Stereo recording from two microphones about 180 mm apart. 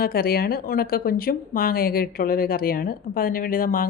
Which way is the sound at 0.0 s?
55° left (ahead or behind).